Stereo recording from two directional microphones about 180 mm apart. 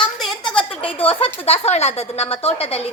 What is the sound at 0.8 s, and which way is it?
A woman's voice, 30° left (ahead or behind).